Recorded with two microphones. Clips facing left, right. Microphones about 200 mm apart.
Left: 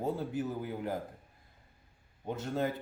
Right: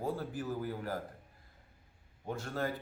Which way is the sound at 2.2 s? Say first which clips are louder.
Left 3 dB; 20° left (ahead or behind).